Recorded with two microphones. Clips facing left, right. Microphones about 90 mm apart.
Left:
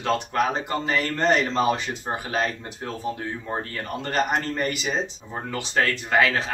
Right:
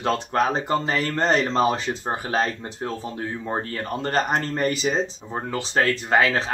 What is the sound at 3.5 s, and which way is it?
Speech, 30° right (ahead or behind).